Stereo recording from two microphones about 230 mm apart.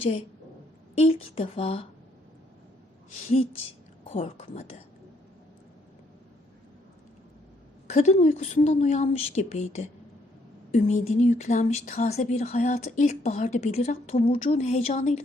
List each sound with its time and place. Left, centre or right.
0.9 s speech: left
4.0 s speech: left
7.9 s speech: left